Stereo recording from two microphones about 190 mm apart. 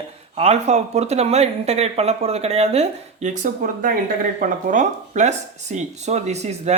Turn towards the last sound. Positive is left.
turn(degrees=-35)  # may be behind; listen again after turning